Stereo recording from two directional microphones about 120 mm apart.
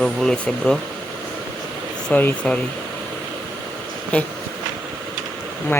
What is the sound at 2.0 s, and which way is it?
Speech, 10° left (ahead or behind).